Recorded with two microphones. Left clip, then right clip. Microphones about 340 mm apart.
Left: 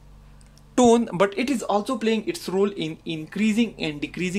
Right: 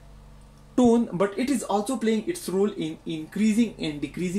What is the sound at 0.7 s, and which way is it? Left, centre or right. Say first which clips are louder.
Speech: left 4 dB; left.